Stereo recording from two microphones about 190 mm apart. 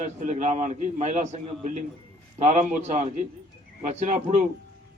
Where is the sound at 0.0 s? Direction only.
40° right (ahead or behind).